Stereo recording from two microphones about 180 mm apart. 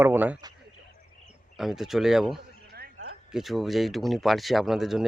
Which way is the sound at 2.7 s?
55° right (ahead or behind).